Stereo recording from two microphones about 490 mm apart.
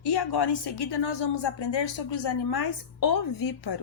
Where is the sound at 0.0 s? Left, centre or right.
Left.